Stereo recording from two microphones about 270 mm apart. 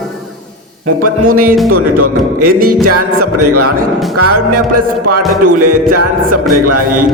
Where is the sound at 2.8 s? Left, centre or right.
Right.